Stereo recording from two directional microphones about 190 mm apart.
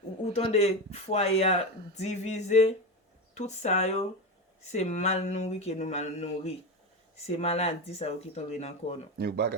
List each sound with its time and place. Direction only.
0.3 s speech: 35° left (ahead or behind)
9.1 s speech: 55° right (ahead or behind)